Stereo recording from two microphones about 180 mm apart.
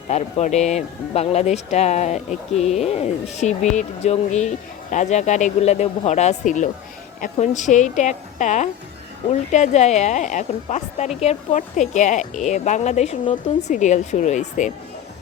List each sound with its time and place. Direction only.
0.1 s speech: 35° left (ahead or behind)